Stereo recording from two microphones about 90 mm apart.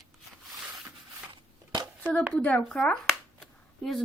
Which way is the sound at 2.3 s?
15° left (ahead or behind).